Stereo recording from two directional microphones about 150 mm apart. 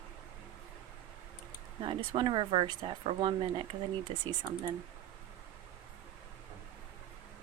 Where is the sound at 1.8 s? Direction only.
30° right (ahead or behind).